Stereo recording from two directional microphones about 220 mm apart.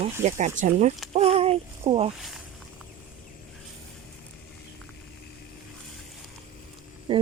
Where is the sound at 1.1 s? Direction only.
25° right (ahead or behind).